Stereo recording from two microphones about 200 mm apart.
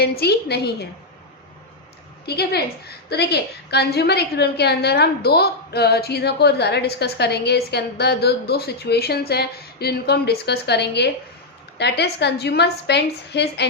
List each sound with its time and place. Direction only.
0.0 s a woman's voice: 50° left (ahead or behind)
2.2 s a woman's voice: 55° left (ahead or behind)